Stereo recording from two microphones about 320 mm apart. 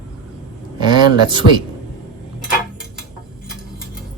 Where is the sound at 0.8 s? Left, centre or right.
Centre.